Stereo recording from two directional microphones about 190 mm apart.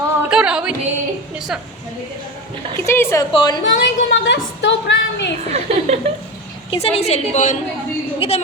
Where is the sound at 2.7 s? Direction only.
15° left (ahead or behind).